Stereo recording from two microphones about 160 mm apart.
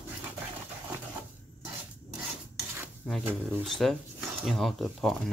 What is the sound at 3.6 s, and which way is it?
Speech, centre (ahead or behind).